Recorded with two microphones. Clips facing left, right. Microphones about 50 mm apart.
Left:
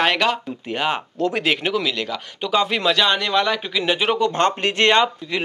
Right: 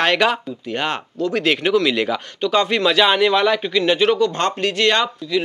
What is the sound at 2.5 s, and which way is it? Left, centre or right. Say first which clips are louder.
Speech: right 1 dB; centre.